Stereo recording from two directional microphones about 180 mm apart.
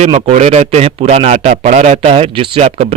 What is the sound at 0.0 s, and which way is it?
A man's voice, 35° right (ahead or behind).